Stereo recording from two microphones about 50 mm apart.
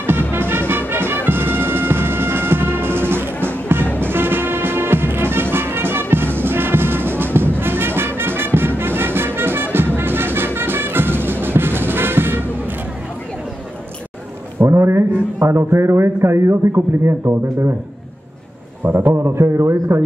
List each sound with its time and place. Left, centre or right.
0.0 s music: right
14.7 s a sound: right
15.3 s a man's voice: right
18.9 s a man's voice: right
19.1 s a man's voice: right